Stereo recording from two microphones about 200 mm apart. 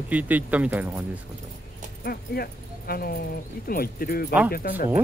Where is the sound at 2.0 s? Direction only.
50° left (ahead or behind).